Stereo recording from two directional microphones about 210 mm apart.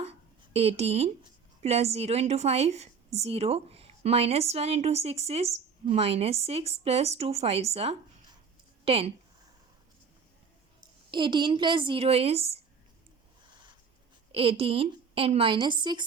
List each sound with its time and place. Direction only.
0.5 s a woman's voice: 30° right (ahead or behind)
11.1 s a woman's voice: 20° right (ahead or behind)
14.3 s a woman's voice: 25° right (ahead or behind)